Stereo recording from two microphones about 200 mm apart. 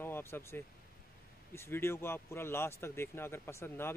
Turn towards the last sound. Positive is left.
turn(degrees=15)  # may be behind; listen again after turning